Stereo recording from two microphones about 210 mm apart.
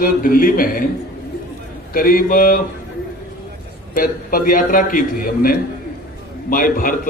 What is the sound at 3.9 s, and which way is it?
A man's voice, 40° left (ahead or behind).